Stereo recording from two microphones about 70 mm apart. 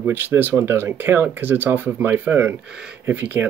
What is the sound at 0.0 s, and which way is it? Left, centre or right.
Speech, right.